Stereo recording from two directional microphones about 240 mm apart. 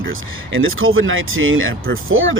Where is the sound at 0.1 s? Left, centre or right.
Right.